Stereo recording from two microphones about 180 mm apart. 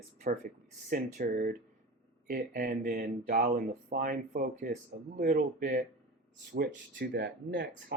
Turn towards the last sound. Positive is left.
turn(degrees=-75)  # may be behind; listen again after turning